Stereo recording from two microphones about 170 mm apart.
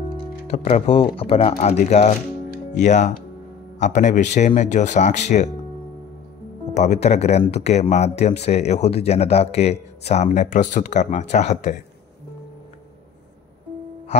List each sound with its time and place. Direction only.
0.5 s speech: 40° left (ahead or behind)
6.7 s speech: 40° left (ahead or behind)